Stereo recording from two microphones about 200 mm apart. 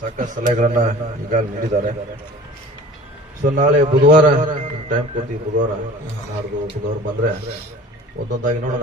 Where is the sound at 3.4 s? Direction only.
40° right (ahead or behind).